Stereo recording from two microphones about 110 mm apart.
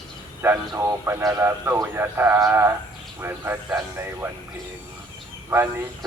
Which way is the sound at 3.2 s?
20° right (ahead or behind).